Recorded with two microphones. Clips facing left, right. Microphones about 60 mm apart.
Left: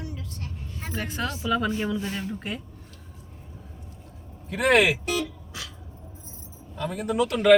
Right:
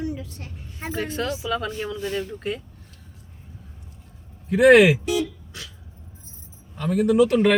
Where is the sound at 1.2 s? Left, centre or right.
Centre.